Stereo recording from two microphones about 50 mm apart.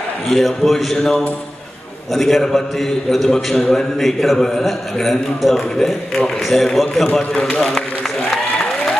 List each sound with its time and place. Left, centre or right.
0.3 s a man's voice: centre
2.1 s a man's voice: centre
7.2 s a man's voice: centre